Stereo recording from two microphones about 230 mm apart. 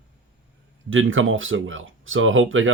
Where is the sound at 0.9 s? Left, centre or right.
Right.